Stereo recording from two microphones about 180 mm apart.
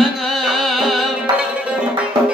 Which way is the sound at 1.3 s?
25° right (ahead or behind).